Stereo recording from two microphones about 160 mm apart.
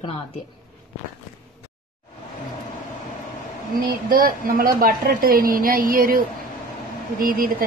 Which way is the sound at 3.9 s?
65° right (ahead or behind).